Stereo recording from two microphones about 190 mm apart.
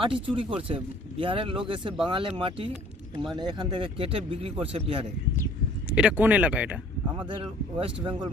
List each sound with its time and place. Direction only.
0.0 s speech: 25° right (ahead or behind)
5.9 s speech: 5° right (ahead or behind)
7.2 s speech: 25° right (ahead or behind)